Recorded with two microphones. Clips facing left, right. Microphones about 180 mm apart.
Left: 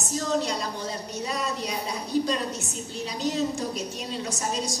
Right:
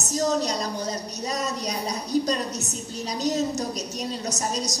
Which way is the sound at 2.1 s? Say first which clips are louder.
Right 1 dB; 40° right (ahead or behind).